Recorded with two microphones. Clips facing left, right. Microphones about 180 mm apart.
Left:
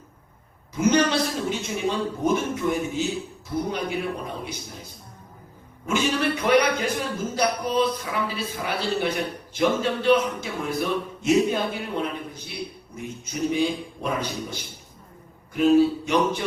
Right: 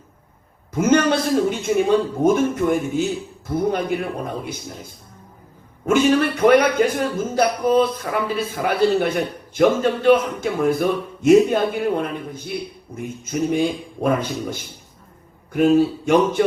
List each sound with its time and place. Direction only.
0.7 s a man's voice: 50° right (ahead or behind)
5.8 s a man's voice: 50° right (ahead or behind)